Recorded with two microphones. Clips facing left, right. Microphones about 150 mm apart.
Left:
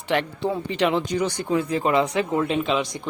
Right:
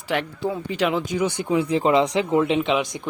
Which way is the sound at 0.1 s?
Centre (ahead or behind).